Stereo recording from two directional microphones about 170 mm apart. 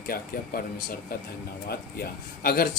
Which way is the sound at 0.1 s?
60° left (ahead or behind).